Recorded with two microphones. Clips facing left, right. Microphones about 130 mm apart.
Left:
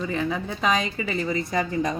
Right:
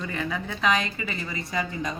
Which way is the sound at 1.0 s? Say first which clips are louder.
Left 7 dB; 35° left (ahead or behind).